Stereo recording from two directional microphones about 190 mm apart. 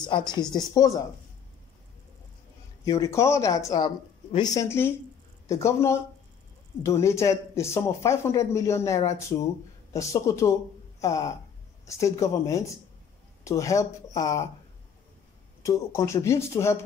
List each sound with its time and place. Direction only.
0.0 s speech: 25° left (ahead or behind)
2.8 s speech: 15° left (ahead or behind)
15.6 s speech: 15° left (ahead or behind)